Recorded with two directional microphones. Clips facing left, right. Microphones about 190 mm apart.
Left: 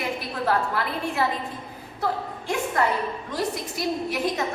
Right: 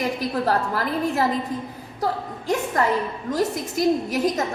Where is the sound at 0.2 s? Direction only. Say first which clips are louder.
Right 3 dB; 40° right (ahead or behind).